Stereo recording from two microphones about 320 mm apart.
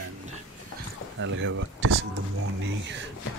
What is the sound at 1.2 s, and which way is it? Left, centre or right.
Speech, right.